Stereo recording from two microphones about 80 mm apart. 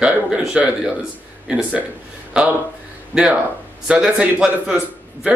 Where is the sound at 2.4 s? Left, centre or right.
Centre.